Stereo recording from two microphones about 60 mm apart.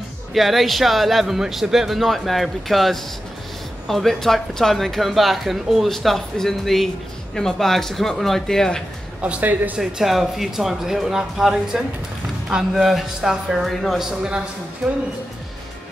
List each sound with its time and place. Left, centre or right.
0.3 s speech: centre
9.2 s a man's voice: right
9.8 s speech: centre